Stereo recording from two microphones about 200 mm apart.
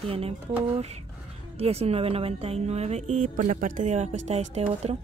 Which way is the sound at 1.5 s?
30° right (ahead or behind).